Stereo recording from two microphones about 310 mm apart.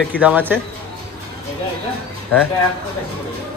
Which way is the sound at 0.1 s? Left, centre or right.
Centre.